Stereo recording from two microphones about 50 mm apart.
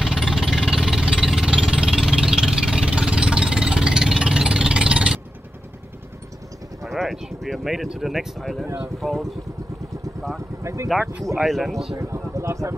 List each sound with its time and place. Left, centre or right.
0.0 s jackhammer: centre
1.2 s engine: centre
6.8 s a sound: centre
8.0 s speech: centre
10.6 s speech: right
11.4 s speech: centre
12.0 s speech: right